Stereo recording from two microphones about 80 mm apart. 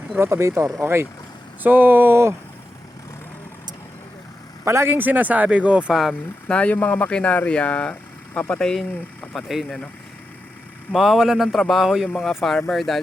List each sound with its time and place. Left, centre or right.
0.2 s speech: right
4.6 s speech: right; by 5.8 s centre
5.9 s speech: centre
6.5 s speech: centre
10.9 s speech: centre